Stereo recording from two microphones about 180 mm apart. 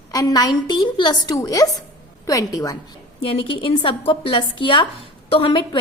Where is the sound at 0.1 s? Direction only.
20° left (ahead or behind).